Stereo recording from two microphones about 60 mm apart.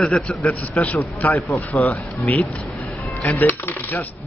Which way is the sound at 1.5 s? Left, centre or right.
Centre.